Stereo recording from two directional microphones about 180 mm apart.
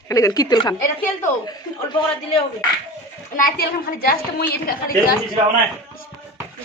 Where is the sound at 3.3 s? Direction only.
55° left (ahead or behind).